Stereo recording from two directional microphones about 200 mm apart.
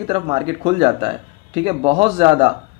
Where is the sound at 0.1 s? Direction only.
30° right (ahead or behind).